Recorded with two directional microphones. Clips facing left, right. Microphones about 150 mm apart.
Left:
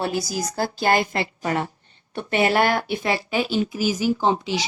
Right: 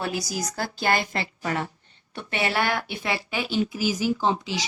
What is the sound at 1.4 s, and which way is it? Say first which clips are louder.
Speech: left 3 dB; 30° left (ahead or behind).